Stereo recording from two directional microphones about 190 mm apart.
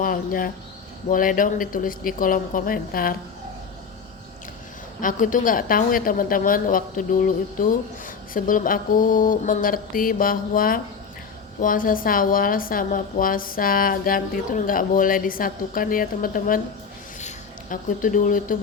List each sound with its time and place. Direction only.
0.0 s a woman's voice: 45° left (ahead or behind)
4.9 s a woman's voice: 45° left (ahead or behind)